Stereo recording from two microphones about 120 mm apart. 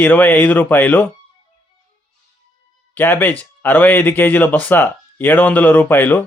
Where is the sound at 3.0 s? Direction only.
15° left (ahead or behind).